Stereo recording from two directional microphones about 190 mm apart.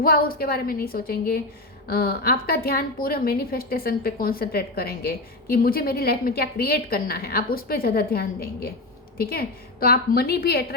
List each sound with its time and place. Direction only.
0.0 s a woman's voice: 50° left (ahead or behind)